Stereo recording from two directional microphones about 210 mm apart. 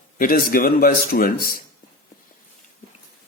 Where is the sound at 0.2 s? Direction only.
45° left (ahead or behind).